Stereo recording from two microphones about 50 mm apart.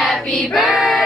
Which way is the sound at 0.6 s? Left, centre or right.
Right.